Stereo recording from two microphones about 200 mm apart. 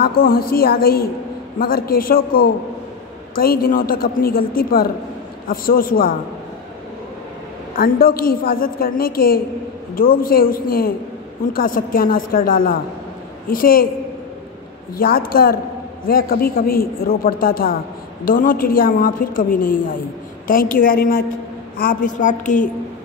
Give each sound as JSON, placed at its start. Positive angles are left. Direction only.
{"t": 0.0, "sound": "a woman's voice", "side_deg": 45}
{"t": 7.7, "sound": "a woman's voice", "side_deg": 45}
{"t": 15.0, "sound": "a woman's voice", "side_deg": 45}